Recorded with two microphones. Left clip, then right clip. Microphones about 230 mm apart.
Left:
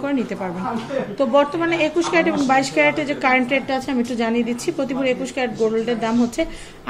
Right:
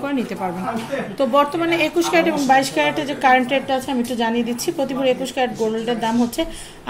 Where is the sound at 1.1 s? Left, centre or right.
Centre.